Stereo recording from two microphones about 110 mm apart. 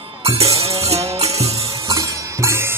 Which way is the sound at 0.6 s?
70° right (ahead or behind).